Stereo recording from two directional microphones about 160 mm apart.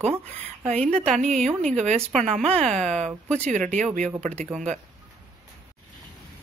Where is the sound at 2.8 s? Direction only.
45° right (ahead or behind).